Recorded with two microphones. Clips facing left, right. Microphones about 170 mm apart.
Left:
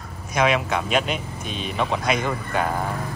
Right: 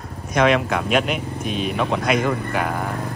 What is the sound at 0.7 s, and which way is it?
Speech, centre (ahead or behind).